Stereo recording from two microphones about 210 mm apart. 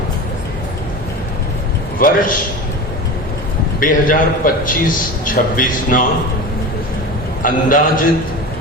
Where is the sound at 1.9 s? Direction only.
40° left (ahead or behind).